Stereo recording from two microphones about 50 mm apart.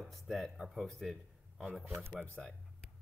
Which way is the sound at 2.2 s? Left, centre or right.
Left.